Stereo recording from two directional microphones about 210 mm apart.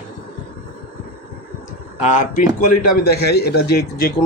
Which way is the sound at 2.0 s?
35° left (ahead or behind).